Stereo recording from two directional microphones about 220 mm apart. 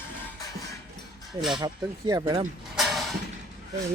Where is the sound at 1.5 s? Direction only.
15° right (ahead or behind).